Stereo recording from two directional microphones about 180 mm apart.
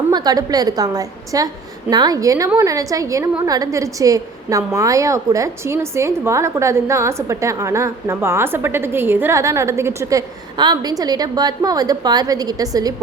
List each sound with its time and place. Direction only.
0.1 s a woman's voice: 20° right (ahead or behind)